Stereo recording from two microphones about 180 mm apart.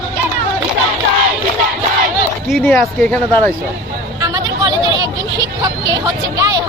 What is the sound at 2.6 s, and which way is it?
Speech, 10° left (ahead or behind).